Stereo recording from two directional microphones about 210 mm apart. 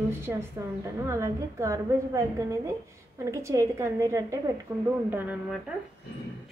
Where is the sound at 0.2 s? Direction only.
10° right (ahead or behind).